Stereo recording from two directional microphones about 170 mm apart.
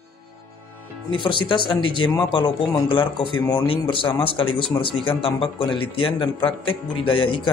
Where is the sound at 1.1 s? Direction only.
30° left (ahead or behind).